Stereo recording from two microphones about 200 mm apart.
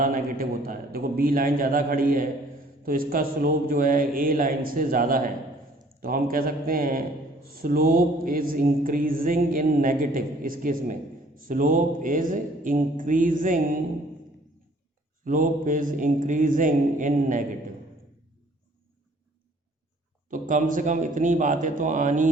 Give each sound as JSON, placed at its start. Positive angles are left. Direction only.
{"t": 0.0, "sound": "a man's voice", "side_deg": -45}
{"t": 15.2, "sound": "a man's voice", "side_deg": -40}
{"t": 20.3, "sound": "a man's voice", "side_deg": -40}